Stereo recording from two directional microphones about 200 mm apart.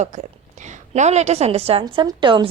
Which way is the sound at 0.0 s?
35° right (ahead or behind).